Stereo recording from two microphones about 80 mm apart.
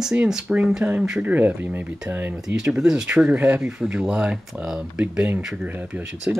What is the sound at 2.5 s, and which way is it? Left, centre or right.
Speech, centre.